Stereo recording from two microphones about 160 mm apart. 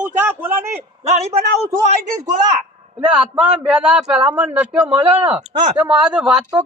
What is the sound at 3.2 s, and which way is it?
A man's voice, 10° right (ahead or behind).